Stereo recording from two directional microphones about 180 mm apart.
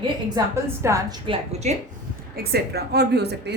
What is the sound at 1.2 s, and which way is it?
Speech, 35° right (ahead or behind).